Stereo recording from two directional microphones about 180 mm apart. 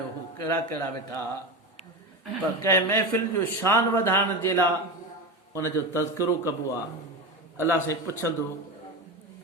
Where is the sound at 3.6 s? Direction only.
15° left (ahead or behind).